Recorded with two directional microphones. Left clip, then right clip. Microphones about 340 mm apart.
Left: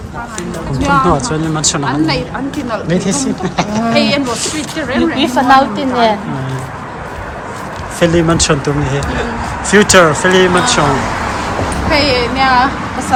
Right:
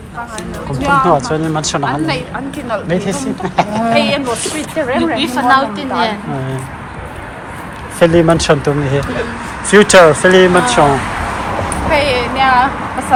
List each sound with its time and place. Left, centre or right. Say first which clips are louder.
0.8 s a woman's voice: right 1 dB; centre
5.1 s a woman's voice: left 4 dB; centre
7.9 s speech: right 2 dB; centre
11.9 s a woman's voice: left 1 dB; centre